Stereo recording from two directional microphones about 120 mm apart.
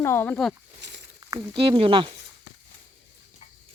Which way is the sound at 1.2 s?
35° right (ahead or behind).